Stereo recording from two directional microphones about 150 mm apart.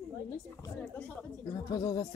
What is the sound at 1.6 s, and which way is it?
Speech, 25° left (ahead or behind).